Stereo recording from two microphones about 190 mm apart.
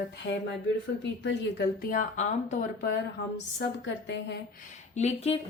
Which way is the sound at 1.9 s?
40° left (ahead or behind).